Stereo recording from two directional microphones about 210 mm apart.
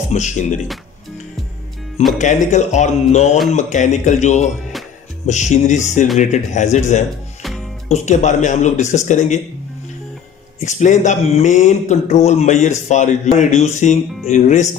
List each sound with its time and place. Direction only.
0.1 s speech: 35° left (ahead or behind)
2.1 s speech: 35° left (ahead or behind)
10.6 s speech: 35° left (ahead or behind)